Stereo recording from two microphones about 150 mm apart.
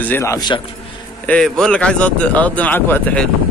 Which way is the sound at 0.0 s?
15° left (ahead or behind).